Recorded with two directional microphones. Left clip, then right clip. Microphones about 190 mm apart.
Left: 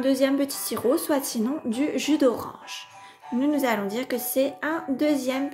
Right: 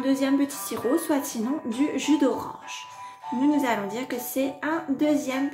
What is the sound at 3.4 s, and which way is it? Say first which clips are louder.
A woman's voice: even; 35° left (ahead or behind).